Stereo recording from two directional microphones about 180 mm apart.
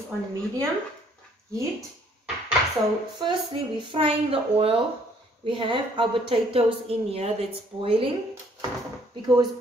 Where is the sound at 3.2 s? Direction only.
25° right (ahead or behind).